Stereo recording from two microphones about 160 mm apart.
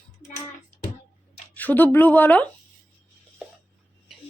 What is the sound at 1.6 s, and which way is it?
Speech, 10° left (ahead or behind).